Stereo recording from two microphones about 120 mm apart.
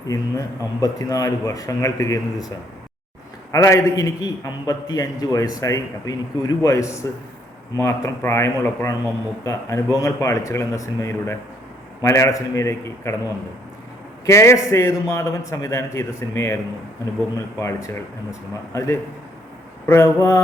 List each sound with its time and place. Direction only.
0.1 s a man's voice: 30° left (ahead or behind)
3.5 s a man's voice: 25° left (ahead or behind)
14.3 s a man's voice: 25° left (ahead or behind)
17.6 s a man's voice: 25° left (ahead or behind)